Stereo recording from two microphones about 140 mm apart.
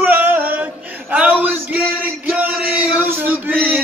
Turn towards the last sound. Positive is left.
turn(degrees=-15)  # may be behind; listen again after turning